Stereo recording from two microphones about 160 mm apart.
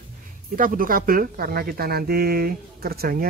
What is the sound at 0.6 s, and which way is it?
Speech, 60° right (ahead or behind).